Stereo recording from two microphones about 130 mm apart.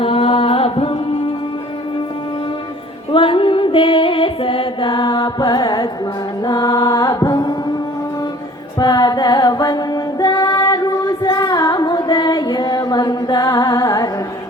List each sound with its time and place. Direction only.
0.0 s mantra: 45° left (ahead or behind)
3.1 s music: 40° left (ahead or behind)
8.8 s music: 30° left (ahead or behind)